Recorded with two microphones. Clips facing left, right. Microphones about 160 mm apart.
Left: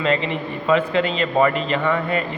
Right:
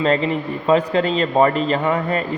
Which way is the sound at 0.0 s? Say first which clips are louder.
Right 3 dB; 40° right (ahead or behind).